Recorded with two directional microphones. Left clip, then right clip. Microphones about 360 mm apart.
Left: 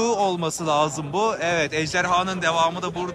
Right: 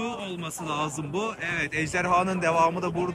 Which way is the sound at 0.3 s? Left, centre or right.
Centre.